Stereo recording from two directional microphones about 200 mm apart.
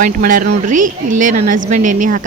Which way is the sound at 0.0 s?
45° right (ahead or behind).